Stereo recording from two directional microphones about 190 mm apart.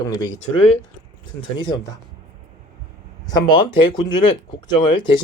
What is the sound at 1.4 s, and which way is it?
Speech, 25° left (ahead or behind).